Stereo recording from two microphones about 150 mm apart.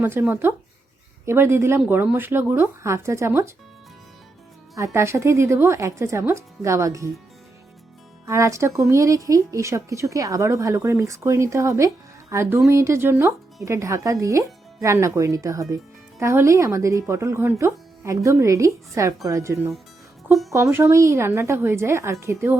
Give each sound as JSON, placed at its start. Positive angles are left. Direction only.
{"t": 0.0, "sound": "speech", "side_deg": -15}
{"t": 4.7, "sound": "a woman's voice", "side_deg": -20}
{"t": 8.3, "sound": "a woman's voice", "side_deg": -20}